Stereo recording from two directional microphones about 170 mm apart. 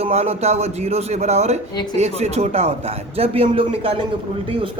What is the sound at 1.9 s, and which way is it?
Speech, 40° right (ahead or behind).